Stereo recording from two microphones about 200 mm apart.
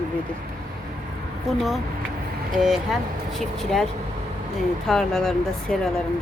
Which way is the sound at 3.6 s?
Centre (ahead or behind).